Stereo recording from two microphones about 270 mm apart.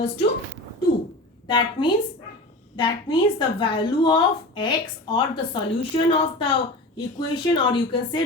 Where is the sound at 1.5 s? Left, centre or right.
Centre.